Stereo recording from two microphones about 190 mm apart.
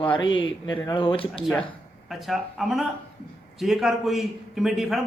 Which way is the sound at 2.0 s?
Centre (ahead or behind).